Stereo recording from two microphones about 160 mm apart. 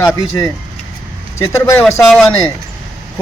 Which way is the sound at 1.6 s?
15° left (ahead or behind).